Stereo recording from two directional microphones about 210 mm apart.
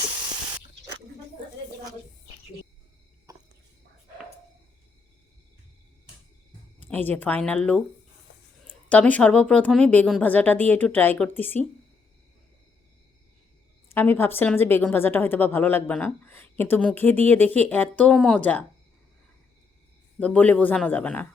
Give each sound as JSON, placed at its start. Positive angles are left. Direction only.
{"t": 3.3, "sound": "a sound", "side_deg": -15}
{"t": 6.9, "sound": "a woman's voice", "side_deg": 10}
{"t": 8.9, "sound": "a woman's voice", "side_deg": 5}
{"t": 13.9, "sound": "a woman's voice", "side_deg": 10}
{"t": 20.1, "sound": "a woman's voice", "side_deg": 5}